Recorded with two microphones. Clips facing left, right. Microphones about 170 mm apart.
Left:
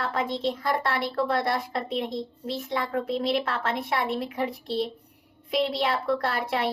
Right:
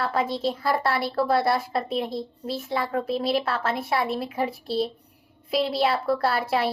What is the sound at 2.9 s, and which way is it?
Speech, 35° right (ahead or behind).